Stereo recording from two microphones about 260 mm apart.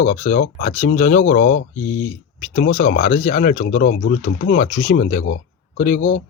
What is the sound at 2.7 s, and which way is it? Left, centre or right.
Speech, left.